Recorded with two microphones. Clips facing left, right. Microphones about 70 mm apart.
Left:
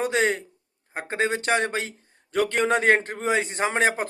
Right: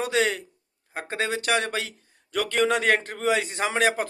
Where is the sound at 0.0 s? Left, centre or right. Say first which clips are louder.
Left 1 dB; left.